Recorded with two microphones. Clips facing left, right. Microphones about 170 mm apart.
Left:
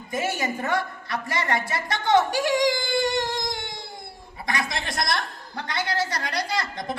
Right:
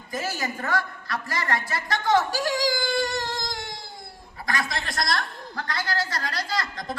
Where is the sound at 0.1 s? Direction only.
20° left (ahead or behind).